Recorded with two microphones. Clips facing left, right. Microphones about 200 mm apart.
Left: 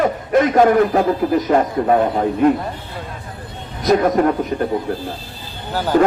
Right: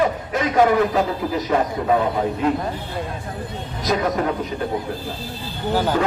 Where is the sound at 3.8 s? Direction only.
55° left (ahead or behind).